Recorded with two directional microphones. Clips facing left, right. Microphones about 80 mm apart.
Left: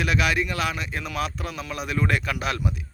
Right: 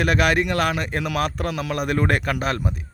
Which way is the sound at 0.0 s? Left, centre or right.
Right.